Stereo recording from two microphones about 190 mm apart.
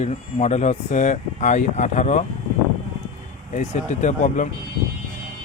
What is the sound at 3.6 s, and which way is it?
Speech, 40° left (ahead or behind).